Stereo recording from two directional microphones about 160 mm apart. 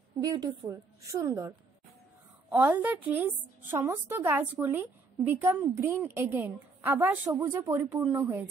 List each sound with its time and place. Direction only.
0.2 s a woman's voice: 25° right (ahead or behind)
2.5 s a woman's voice: 10° right (ahead or behind)